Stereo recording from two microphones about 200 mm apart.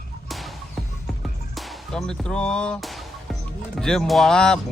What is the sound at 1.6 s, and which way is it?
Music, 5° left (ahead or behind).